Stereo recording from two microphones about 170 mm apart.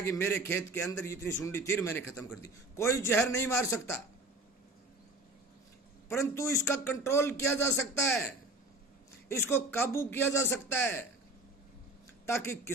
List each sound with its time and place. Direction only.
0.0 s a man's voice: 15° left (ahead or behind)
6.1 s a man's voice: 15° left (ahead or behind)
9.3 s a man's voice: 15° left (ahead or behind)
12.2 s a man's voice: 15° left (ahead or behind)